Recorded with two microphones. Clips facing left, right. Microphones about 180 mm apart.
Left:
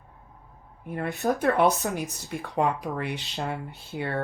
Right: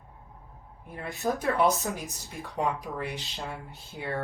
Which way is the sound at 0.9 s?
65° left (ahead or behind).